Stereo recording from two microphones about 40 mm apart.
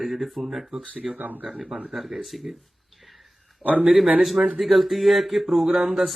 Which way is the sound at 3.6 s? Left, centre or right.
Right.